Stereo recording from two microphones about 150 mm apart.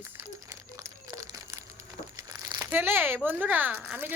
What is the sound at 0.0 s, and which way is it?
Crumpling, 20° right (ahead or behind).